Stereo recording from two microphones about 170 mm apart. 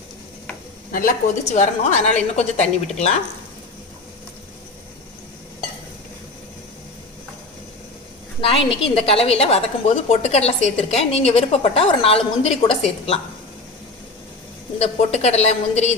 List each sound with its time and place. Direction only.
0.9 s a woman's voice: 55° left (ahead or behind)
8.4 s a woman's voice: 35° left (ahead or behind)
14.8 s a woman's voice: 40° left (ahead or behind)